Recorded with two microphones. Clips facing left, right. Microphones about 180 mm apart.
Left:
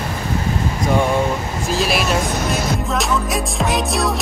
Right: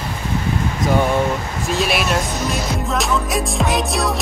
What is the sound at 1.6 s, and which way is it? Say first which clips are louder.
Music: even; centre (ahead or behind).